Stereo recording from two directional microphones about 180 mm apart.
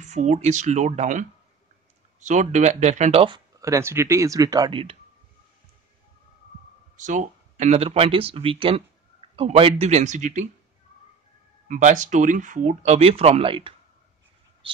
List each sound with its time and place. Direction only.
0.0 s speech: 40° right (ahead or behind)
7.0 s speech: 45° right (ahead or behind)
11.6 s speech: 45° right (ahead or behind); by 13.7 s 30° right (ahead or behind)